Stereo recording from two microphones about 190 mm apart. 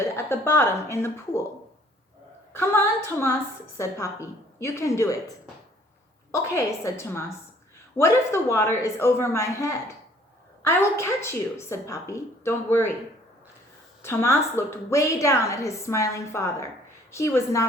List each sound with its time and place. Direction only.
0.2 s a woman's voice: 15° left (ahead or behind)
2.5 s a woman's voice: 15° left (ahead or behind)
6.3 s a woman's voice: 15° left (ahead or behind)
14.0 s a woman's voice: 15° left (ahead or behind)